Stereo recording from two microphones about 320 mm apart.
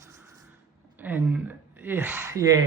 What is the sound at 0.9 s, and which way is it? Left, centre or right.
Speech, centre.